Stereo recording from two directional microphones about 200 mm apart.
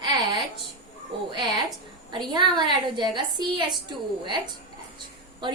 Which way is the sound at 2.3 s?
20° right (ahead or behind).